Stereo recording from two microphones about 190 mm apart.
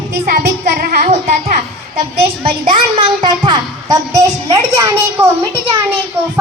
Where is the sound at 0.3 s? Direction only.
45° right (ahead or behind); by 5.3 s 15° right (ahead or behind).